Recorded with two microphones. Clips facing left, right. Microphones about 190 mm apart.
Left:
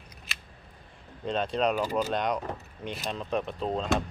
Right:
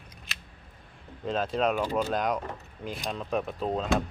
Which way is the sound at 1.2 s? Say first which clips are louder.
Even; 5° right (ahead or behind).